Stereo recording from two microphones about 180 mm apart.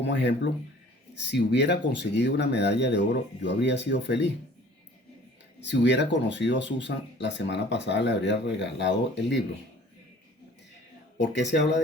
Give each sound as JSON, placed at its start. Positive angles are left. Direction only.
{"t": 0.0, "sound": "speech", "side_deg": 80}
{"t": 5.5, "sound": "speech", "side_deg": 75}
{"t": 11.2, "sound": "speech", "side_deg": 75}